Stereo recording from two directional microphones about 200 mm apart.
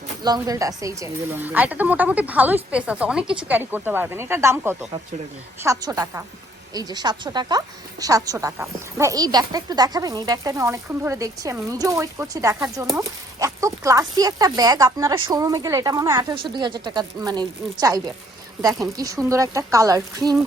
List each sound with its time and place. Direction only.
0.2 s speech: 20° right (ahead or behind)